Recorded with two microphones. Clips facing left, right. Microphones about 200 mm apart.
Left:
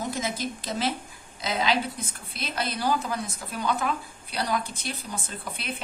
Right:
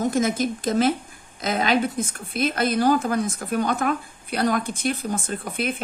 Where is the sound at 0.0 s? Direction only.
50° right (ahead or behind).